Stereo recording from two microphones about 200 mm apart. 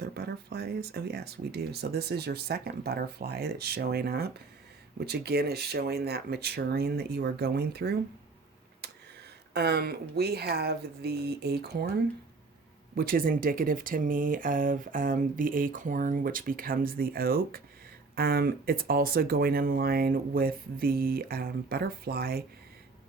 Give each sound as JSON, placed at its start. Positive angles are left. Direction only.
{"t": 0.0, "sound": "speech", "side_deg": -55}
{"t": 8.8, "sound": "a sound", "side_deg": -55}
{"t": 9.5, "sound": "speech", "side_deg": -55}
{"t": 13.0, "sound": "speech", "side_deg": -45}